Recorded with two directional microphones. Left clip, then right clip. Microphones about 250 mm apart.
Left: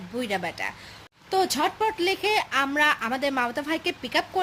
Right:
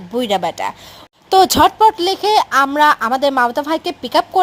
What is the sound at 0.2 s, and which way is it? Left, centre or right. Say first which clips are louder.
Speech: right 11 dB; right.